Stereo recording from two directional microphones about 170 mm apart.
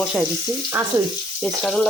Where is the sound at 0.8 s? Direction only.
15° right (ahead or behind).